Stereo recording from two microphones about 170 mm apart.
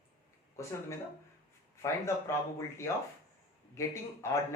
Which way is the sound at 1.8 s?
15° left (ahead or behind).